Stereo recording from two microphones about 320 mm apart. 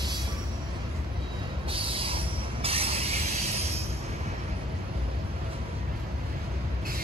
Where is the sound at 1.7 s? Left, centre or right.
Centre.